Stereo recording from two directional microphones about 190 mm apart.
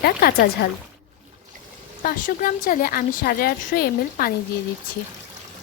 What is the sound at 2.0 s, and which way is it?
A woman's voice, 45° left (ahead or behind).